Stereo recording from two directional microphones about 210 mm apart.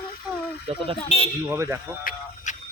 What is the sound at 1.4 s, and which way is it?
Speech, 10° right (ahead or behind).